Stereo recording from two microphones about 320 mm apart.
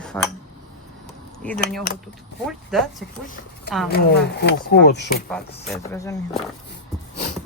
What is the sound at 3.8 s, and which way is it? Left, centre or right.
Speech, left.